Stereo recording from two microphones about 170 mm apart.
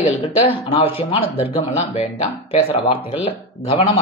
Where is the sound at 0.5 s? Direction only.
35° left (ahead or behind).